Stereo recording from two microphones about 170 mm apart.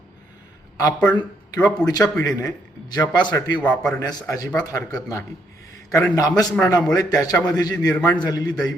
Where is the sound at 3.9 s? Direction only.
20° left (ahead or behind).